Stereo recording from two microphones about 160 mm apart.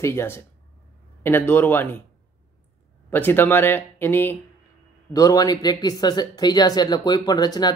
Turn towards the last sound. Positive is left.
turn(degrees=25)  # may be behind; listen again after turning